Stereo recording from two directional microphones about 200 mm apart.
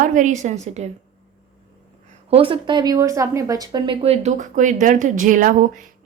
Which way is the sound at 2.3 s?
25° right (ahead or behind).